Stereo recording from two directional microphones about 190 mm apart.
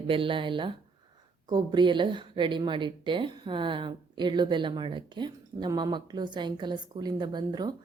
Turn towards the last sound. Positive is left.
turn(degrees=-20)  # may be behind; listen again after turning